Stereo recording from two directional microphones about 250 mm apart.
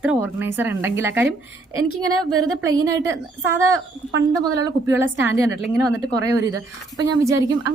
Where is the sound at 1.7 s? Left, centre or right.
Right.